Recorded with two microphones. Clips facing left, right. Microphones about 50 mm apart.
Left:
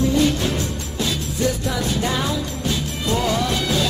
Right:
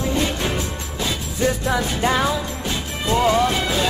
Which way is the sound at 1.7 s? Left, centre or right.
Right.